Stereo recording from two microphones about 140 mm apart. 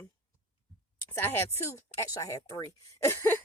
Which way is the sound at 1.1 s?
15° left (ahead or behind).